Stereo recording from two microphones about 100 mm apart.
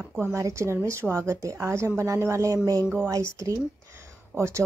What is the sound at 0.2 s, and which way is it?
A woman's voice, 30° right (ahead or behind).